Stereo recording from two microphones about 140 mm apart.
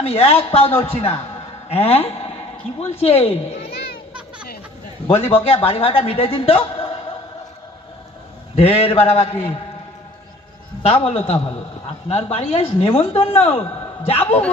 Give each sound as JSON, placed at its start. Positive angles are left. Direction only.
{"t": 0.0, "sound": "a man's voice", "side_deg": 45}
{"t": 5.0, "sound": "a man's voice", "side_deg": 45}
{"t": 8.5, "sound": "a man's voice", "side_deg": 45}
{"t": 10.9, "sound": "a man's voice", "side_deg": 45}